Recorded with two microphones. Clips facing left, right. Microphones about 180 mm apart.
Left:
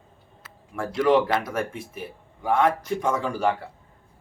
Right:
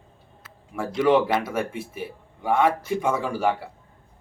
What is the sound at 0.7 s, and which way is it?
Speech, 5° right (ahead or behind).